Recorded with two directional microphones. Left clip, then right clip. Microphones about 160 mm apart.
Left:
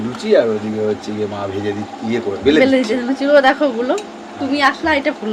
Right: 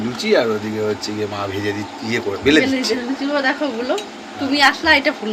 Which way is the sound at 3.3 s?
65° left (ahead or behind).